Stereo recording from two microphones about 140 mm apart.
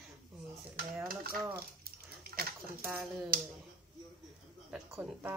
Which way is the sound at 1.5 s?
90° right.